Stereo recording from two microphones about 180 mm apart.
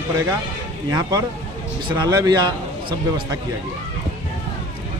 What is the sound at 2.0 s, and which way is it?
Speech, 20° right (ahead or behind).